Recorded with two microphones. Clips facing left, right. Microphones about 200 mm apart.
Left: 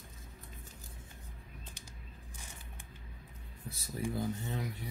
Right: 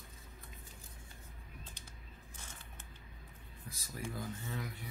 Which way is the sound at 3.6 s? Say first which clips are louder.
Left 5 dB; 25° left (ahead or behind).